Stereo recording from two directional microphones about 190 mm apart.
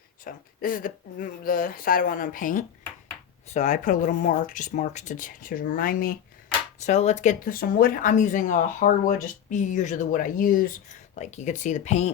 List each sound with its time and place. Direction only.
0.3 s speech: 50° left (ahead or behind)
6.7 s speech: 35° left (ahead or behind)
11.1 s speech: 40° left (ahead or behind)